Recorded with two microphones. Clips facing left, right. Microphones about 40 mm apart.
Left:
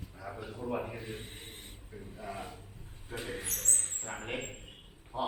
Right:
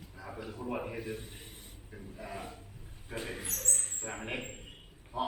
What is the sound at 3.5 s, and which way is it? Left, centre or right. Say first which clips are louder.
Speech: even; left.